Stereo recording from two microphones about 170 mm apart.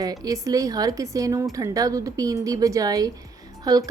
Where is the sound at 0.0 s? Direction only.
20° right (ahead or behind).